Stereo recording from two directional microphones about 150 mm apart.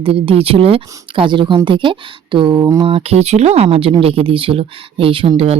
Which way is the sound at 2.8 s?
40° right (ahead or behind).